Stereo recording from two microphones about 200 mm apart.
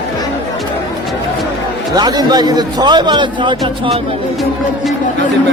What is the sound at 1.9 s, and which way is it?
A man's voice, 20° right (ahead or behind).